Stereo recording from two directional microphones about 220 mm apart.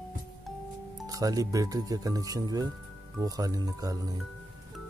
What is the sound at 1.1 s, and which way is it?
Speech, 15° right (ahead or behind).